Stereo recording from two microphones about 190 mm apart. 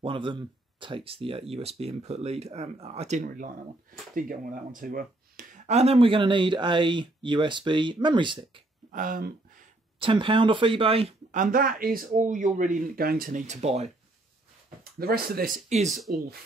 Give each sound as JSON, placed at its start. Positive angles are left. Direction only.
{"t": 0.0, "sound": "speech", "side_deg": -25}
{"t": 8.9, "sound": "speech", "side_deg": -45}
{"t": 9.9, "sound": "speech", "side_deg": -25}
{"t": 14.8, "sound": "speech", "side_deg": -50}
{"t": 15.9, "sound": "speech", "side_deg": 0}